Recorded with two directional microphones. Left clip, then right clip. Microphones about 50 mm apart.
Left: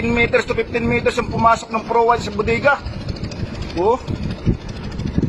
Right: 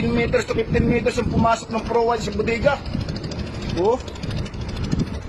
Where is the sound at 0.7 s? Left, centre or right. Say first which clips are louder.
Left 2 dB; left.